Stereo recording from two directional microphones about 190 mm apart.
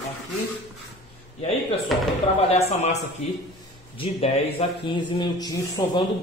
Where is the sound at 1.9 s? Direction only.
Centre (ahead or behind).